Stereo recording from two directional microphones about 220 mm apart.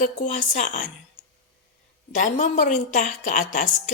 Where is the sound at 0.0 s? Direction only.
35° left (ahead or behind).